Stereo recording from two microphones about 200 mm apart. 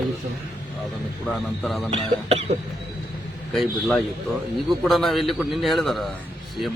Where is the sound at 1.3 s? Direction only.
Centre (ahead or behind).